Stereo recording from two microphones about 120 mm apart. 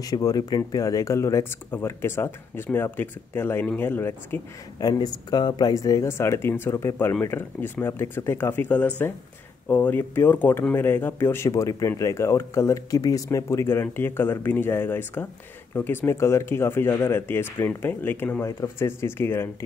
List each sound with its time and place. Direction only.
0.0 s speech: 30° left (ahead or behind)
4.7 s speech: 35° left (ahead or behind)